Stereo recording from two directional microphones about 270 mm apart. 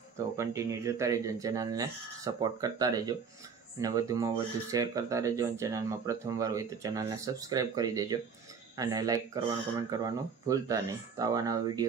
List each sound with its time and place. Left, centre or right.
0.4 s speech: centre